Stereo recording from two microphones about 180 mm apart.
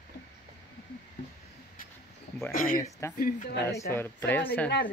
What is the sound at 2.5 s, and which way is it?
Speech, 50° left (ahead or behind).